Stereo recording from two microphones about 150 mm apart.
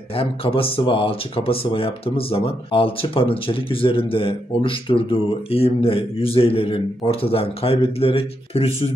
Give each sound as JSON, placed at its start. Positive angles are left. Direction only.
{"t": 0.1, "sound": "speech", "side_deg": 40}